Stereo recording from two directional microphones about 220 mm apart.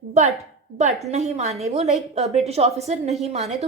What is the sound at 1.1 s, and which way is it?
A woman's voice, 30° right (ahead or behind).